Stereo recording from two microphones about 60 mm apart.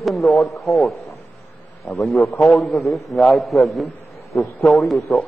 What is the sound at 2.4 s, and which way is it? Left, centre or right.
A man's voice, centre.